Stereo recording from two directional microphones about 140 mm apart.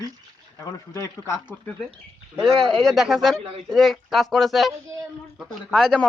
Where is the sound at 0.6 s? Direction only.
20° left (ahead or behind).